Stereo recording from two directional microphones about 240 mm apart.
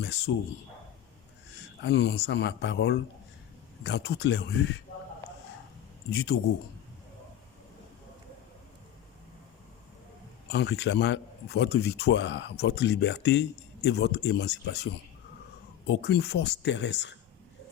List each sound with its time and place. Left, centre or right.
0.3 s a man's voice: left
1.8 s a man's voice: left
6.1 s a man's voice: left
10.5 s a man's voice: left
15.9 s a man's voice: left